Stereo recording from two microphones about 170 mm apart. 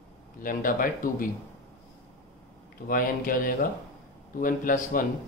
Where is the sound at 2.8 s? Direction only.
55° left (ahead or behind).